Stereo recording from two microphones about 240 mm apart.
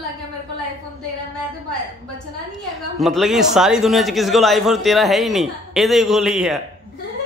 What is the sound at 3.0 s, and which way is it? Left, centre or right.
A man's voice, centre.